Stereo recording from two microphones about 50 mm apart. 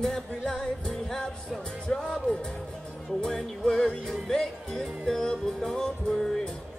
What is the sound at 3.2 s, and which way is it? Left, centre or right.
Music, centre.